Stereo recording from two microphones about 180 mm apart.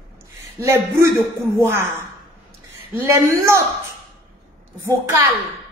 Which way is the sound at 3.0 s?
15° right (ahead or behind).